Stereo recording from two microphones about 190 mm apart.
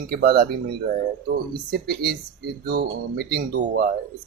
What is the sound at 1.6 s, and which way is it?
Speech, 55° right (ahead or behind).